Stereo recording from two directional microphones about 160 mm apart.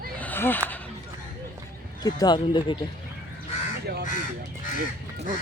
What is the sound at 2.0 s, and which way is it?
Speech, 25° left (ahead or behind).